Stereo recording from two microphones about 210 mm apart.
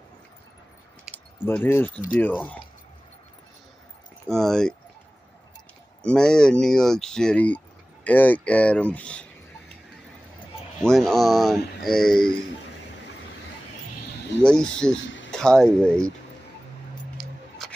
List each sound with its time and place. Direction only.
1.1 s speech: 10° left (ahead or behind)
4.3 s speech: centre (ahead or behind)
6.0 s speech: 5° left (ahead or behind)
10.8 s speech: centre (ahead or behind)
14.4 s speech: 5° left (ahead or behind)
15.0 s a sound: 60° left (ahead or behind)
15.3 s speech: 5° left (ahead or behind)
17.2 s music: centre (ahead or behind)